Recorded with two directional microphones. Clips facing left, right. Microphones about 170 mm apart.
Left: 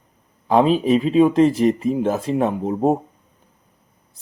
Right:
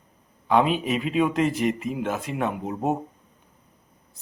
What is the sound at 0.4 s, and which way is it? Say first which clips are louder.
Speech: left 6 dB; 35° left (ahead or behind).